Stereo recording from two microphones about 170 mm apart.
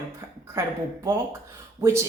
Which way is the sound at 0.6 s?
15° right (ahead or behind).